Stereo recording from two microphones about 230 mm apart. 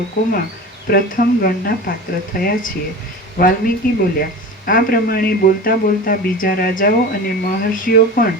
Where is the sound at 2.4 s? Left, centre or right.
Left.